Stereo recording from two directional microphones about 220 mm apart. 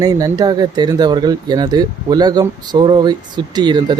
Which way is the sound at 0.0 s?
15° right (ahead or behind).